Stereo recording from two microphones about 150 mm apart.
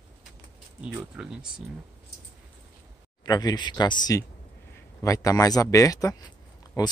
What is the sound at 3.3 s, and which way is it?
Speech, 25° left (ahead or behind).